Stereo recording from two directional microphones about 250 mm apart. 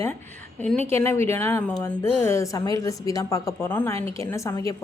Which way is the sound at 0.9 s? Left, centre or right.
Centre.